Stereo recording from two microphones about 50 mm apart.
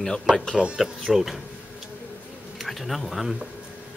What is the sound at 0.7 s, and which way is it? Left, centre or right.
Speech, centre.